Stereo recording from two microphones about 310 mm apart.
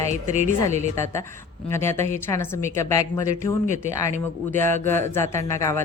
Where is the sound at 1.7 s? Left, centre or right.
Centre.